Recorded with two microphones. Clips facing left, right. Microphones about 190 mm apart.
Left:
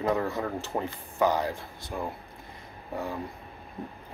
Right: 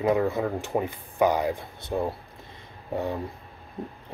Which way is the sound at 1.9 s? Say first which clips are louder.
Right 7 dB; 25° right (ahead or behind).